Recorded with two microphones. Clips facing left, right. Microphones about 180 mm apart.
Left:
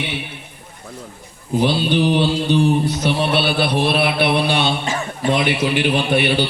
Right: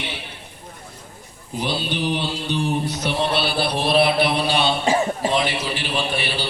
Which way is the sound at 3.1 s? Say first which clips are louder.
Left 2 dB; 60° left (ahead or behind).